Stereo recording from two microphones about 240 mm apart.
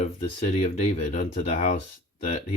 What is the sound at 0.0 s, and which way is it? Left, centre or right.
Speech, left.